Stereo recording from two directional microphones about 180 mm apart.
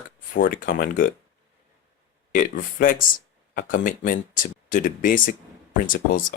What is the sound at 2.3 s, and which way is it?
Speech, 50° left (ahead or behind).